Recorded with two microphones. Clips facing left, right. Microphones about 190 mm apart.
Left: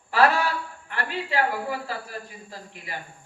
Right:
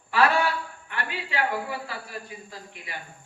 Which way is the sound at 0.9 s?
40° left (ahead or behind).